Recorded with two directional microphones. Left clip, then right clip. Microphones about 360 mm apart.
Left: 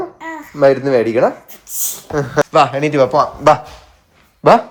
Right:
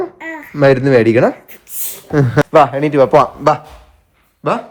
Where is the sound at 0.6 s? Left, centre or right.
Right.